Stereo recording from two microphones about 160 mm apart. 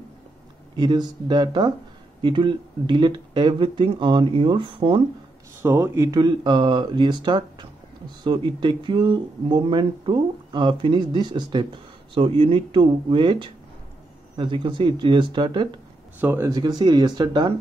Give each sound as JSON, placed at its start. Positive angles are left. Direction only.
{"t": 0.7, "sound": "speech", "side_deg": -25}
{"t": 5.6, "sound": "speech", "side_deg": -15}
{"t": 6.0, "sound": "speech", "side_deg": -25}
{"t": 16.2, "sound": "speech", "side_deg": -15}
{"t": 16.5, "sound": "speech", "side_deg": -25}